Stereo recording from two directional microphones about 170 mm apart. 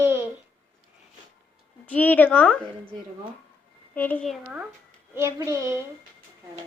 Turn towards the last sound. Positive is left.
turn(degrees=-15)  # may be behind; listen again after turning